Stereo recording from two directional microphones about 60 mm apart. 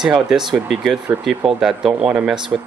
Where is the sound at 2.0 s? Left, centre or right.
Centre.